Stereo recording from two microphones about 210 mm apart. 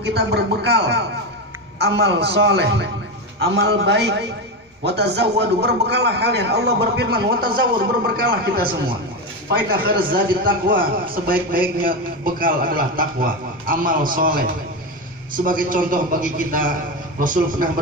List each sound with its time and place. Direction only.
0.0 s a man's voice: 50° right (ahead or behind)
10.1 s a man's voice: 45° right (ahead or behind)